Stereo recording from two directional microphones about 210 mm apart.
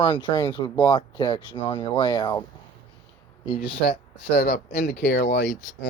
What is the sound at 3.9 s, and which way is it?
Speech, 45° left (ahead or behind).